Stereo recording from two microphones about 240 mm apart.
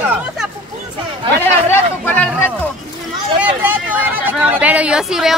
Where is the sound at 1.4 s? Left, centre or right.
Centre.